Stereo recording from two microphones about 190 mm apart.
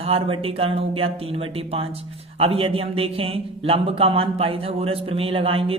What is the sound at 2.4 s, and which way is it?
A man's voice, 30° right (ahead or behind).